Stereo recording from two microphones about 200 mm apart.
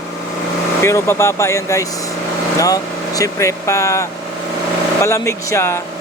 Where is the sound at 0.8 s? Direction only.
15° left (ahead or behind).